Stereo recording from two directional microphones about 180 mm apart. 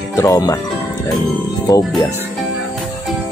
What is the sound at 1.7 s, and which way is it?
Music, 20° left (ahead or behind).